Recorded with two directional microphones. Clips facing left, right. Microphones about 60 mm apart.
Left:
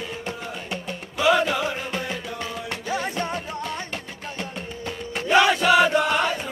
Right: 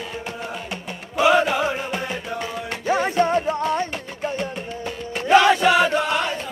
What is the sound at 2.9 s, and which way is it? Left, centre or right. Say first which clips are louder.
Music: right 9 dB; right.